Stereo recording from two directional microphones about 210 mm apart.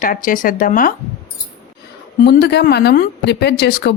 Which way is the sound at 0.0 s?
40° left (ahead or behind).